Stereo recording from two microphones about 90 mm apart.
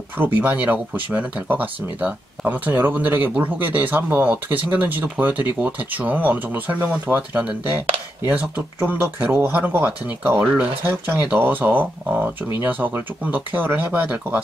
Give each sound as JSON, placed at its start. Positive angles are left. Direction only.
{"t": 0.2, "sound": "speech", "side_deg": -20}